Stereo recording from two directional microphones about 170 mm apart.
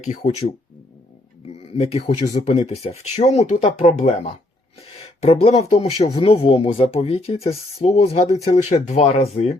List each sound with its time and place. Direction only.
0.0 s speech: 45° left (ahead or behind)
1.7 s speech: 40° left (ahead or behind)